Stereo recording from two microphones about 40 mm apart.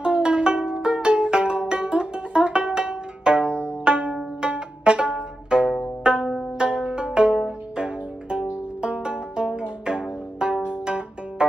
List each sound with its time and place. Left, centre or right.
0.0 s music: right
3.6 s pizzicato: right
6.6 s music: right